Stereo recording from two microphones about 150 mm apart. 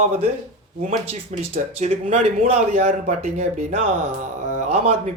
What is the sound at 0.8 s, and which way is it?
Speech, 50° right (ahead or behind).